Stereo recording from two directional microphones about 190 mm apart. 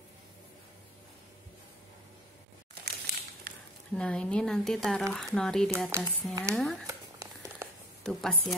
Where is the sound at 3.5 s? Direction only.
50° right (ahead or behind).